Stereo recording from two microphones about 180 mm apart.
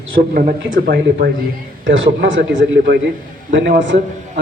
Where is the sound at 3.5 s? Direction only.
90° right.